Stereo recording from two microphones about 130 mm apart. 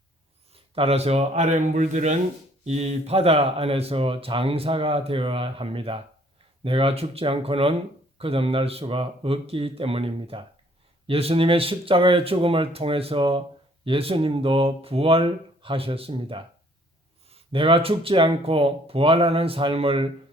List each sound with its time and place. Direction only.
0.5 s a man's voice: 50° right (ahead or behind)